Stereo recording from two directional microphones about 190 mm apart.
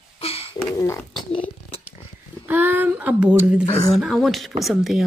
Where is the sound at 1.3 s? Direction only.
30° left (ahead or behind).